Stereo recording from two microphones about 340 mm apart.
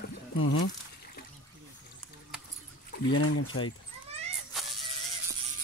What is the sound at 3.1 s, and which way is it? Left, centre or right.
Speech, left.